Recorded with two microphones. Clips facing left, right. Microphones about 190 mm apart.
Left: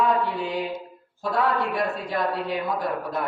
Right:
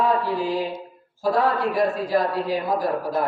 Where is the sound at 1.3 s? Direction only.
30° right (ahead or behind).